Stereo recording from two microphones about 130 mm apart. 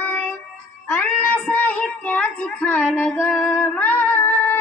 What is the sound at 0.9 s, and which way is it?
Music, 10° left (ahead or behind).